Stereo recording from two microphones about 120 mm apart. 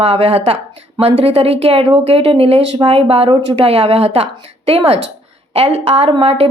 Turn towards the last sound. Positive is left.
turn(degrees=-50)  # may be behind; listen again after turning